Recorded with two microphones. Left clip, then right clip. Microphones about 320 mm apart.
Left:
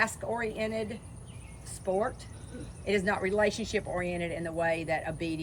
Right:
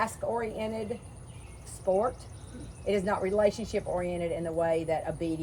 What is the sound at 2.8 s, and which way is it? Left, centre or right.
Speech, centre.